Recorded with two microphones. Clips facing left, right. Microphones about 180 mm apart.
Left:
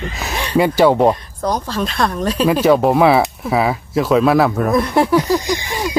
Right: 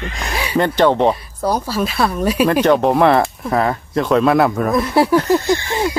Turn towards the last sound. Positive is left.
turn(degrees=15)  # may be behind; listen again after turning